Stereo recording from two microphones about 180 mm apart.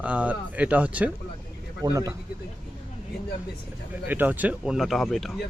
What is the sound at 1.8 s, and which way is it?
Speech, 20° right (ahead or behind).